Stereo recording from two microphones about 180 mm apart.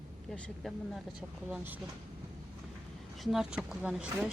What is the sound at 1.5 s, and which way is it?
Speech, 10° right (ahead or behind).